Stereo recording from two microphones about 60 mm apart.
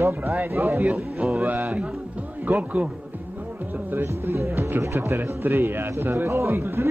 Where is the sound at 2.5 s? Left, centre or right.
Right.